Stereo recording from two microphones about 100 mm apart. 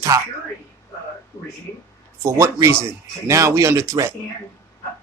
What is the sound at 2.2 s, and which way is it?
Speech, 30° right (ahead or behind).